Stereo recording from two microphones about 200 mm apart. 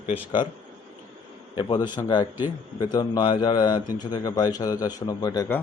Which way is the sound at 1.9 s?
20° left (ahead or behind).